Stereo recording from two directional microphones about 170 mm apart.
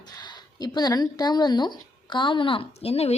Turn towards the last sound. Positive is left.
turn(degrees=35)  # may be behind; listen again after turning